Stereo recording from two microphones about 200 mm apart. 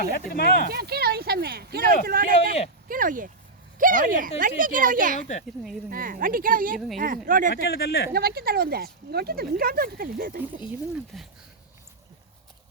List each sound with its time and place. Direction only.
0.1 s speech: 50° left (ahead or behind)
0.7 s speech: 50° right (ahead or behind)
6.7 s a woman's voice: centre (ahead or behind)
7.3 s speech: 40° right (ahead or behind)
7.5 s speech: 50° left (ahead or behind)
8.1 s speech: 50° right (ahead or behind)
11.1 s a woman's voice: centre (ahead or behind)